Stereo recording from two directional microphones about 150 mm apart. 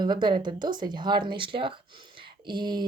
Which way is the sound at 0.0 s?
30° right (ahead or behind).